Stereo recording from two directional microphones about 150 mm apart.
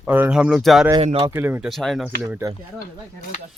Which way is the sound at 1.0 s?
45° right (ahead or behind).